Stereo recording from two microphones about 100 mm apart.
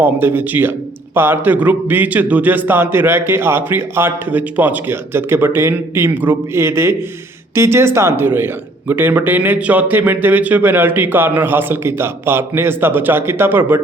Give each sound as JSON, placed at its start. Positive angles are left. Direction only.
{"t": 0.0, "sound": "a man's voice", "side_deg": -20}